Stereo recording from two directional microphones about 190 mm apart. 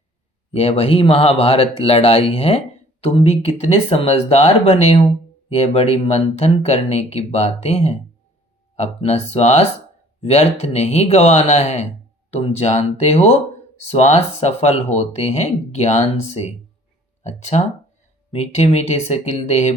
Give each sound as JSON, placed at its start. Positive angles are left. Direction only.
{"t": 0.5, "sound": "speech", "side_deg": 30}